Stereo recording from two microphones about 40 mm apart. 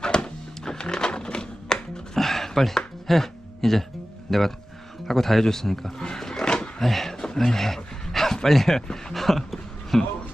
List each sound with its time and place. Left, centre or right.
0.0 s a sound: left
2.1 s a sound: centre
3.1 s music: centre
4.3 s speech: centre
6.0 s roaring cats: centre
6.8 s speech: centre